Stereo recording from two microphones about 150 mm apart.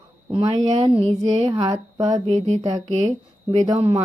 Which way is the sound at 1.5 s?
25° right (ahead or behind).